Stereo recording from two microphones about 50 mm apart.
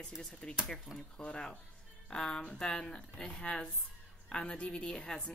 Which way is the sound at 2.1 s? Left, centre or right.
Centre.